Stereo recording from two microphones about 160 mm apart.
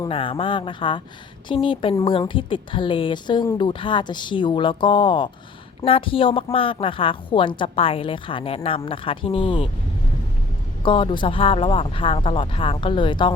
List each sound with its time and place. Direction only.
0.1 s a woman's voice: 35° left (ahead or behind)
10.8 s a woman's voice: 30° left (ahead or behind)